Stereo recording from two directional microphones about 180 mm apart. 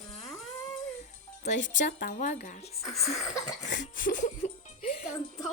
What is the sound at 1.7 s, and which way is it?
Speech, 45° left (ahead or behind).